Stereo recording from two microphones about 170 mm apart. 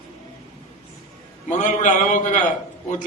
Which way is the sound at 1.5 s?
45° left (ahead or behind).